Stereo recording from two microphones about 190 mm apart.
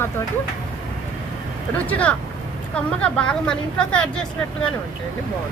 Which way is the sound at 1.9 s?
5° left (ahead or behind).